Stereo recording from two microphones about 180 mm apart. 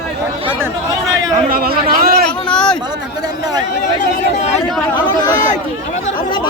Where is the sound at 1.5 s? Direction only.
55° right (ahead or behind).